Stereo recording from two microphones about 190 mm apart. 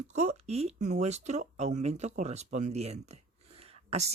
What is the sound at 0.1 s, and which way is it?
Speech, 35° right (ahead or behind).